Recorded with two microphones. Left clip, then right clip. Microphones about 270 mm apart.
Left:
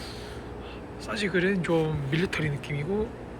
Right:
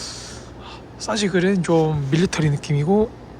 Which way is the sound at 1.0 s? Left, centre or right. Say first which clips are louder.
Right 7 dB; centre.